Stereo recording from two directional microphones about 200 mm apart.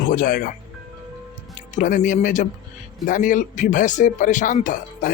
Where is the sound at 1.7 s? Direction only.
40° left (ahead or behind).